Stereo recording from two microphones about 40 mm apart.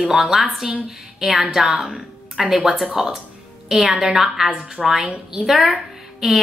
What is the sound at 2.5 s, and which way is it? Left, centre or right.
Speech, centre.